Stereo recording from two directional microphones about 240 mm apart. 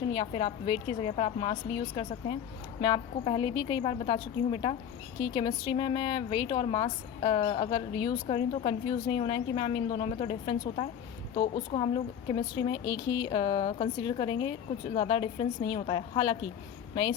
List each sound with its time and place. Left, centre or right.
0.1 s a woman's voice: left